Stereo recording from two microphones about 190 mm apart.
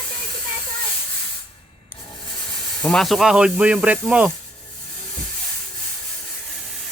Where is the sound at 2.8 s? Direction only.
Centre (ahead or behind).